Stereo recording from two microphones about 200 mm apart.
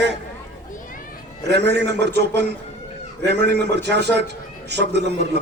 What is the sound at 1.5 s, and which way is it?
Speech, 55° right (ahead or behind).